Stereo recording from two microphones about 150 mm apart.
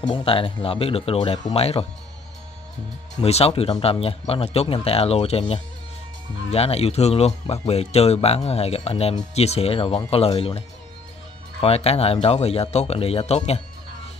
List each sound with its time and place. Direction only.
0.0 s speech: 35° left (ahead or behind)
3.2 s speech: 45° left (ahead or behind)
6.5 s speech: 40° left (ahead or behind)
11.6 s speech: 40° left (ahead or behind)